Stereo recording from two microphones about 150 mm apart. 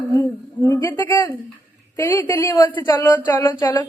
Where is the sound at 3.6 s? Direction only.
25° left (ahead or behind).